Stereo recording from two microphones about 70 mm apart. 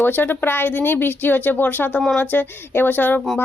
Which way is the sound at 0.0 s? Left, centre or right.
Left.